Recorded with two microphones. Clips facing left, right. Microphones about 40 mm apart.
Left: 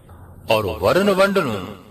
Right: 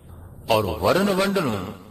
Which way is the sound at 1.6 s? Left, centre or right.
Left.